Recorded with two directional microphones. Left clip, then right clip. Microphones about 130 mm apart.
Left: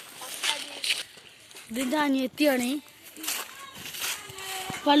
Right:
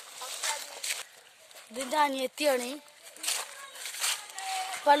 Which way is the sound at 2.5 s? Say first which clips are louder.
Left 4 dB; 90° right.